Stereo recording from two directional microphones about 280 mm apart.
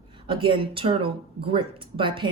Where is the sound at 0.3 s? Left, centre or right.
Centre.